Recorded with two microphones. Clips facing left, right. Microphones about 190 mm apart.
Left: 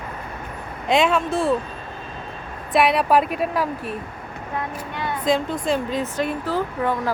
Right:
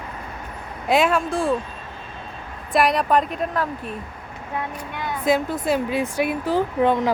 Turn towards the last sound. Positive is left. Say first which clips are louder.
# right 4 dB
turn(degrees=-20)  # may be behind; listen again after turning